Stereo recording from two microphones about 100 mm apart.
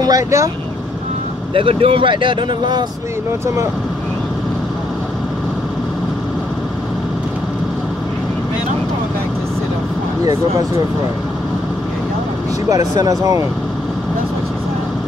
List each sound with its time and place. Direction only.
0.0 s speech: 35° right (ahead or behind)
1.5 s speech: 70° right (ahead or behind); by 2.8 s 50° right (ahead or behind)
12.6 s speech: 40° right (ahead or behind)